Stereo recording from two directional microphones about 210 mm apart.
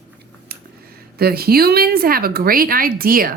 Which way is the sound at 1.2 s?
45° right (ahead or behind).